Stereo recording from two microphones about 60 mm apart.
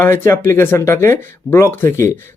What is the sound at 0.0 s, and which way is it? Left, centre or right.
Speech, left.